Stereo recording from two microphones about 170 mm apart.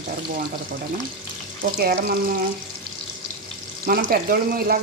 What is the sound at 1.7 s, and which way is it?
Frying, 60° right (ahead or behind).